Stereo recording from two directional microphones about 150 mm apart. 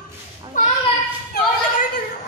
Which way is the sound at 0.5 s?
60° left (ahead or behind).